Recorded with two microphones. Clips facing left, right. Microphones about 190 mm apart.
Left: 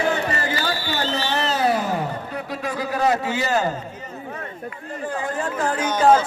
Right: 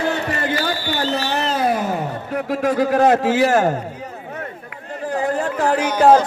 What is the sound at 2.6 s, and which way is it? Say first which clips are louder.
Speech: right 10 dB; 50° right (ahead or behind).